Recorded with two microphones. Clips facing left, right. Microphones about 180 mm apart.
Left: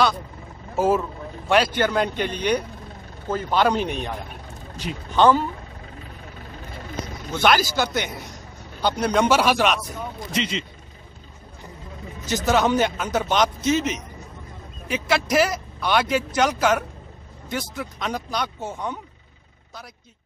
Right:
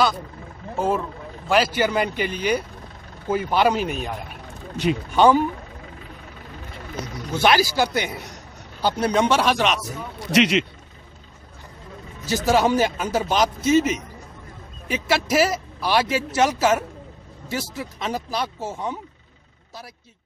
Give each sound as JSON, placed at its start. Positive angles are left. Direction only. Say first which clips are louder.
{"t": 0.7, "sound": "speech", "louder": "left 3 dB", "side_deg": 5}
{"t": 7.3, "sound": "speech", "louder": "right 1 dB", "side_deg": -10}
{"t": 10.3, "sound": "speech", "louder": "right 9 dB", "side_deg": -75}
{"t": 12.3, "sound": "speech", "louder": "right 1 dB", "side_deg": -10}
{"t": 15.0, "sound": "speech", "louder": "right 1 dB", "side_deg": -5}